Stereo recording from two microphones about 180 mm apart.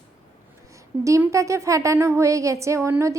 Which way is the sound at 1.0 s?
15° right (ahead or behind).